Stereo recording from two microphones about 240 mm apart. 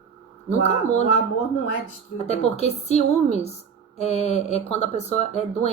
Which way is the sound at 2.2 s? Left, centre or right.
Left.